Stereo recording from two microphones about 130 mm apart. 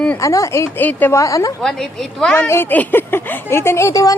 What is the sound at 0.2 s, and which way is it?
Speech, 25° left (ahead or behind).